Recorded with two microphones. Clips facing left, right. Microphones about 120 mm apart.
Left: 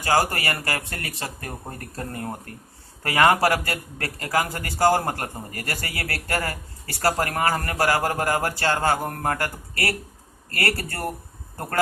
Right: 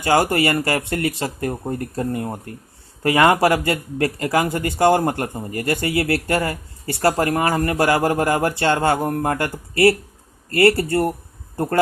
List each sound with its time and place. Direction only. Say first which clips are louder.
0.0 s speech: right 5 dB; 25° right (ahead or behind)